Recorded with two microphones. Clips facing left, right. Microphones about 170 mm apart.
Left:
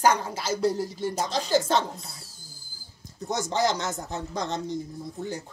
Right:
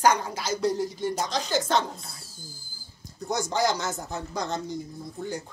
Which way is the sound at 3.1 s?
Centre (ahead or behind).